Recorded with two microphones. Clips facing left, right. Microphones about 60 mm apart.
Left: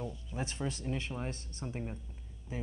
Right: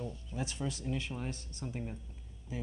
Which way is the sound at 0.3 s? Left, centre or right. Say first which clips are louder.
Even; left.